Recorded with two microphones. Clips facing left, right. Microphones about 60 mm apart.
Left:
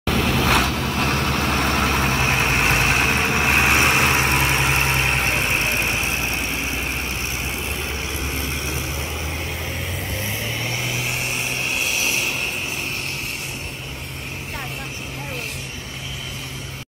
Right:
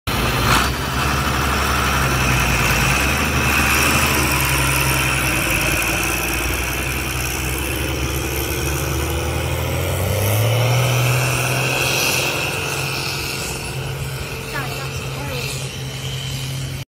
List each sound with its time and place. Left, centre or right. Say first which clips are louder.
0.1 s vehicle: right 1 dB; centre
11.9 s vehicle: right 3 dB; centre